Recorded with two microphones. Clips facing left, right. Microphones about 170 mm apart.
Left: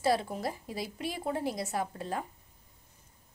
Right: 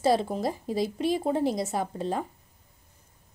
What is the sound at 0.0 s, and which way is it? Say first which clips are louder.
A woman's voice: right 5 dB; 25° right (ahead or behind).